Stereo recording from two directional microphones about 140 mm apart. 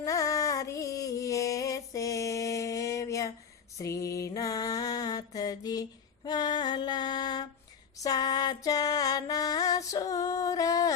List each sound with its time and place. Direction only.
0.0 s music: 25° left (ahead or behind)
3.8 s mantra: 25° left (ahead or behind)
6.2 s female singing: 30° left (ahead or behind)
7.9 s music: 25° left (ahead or behind)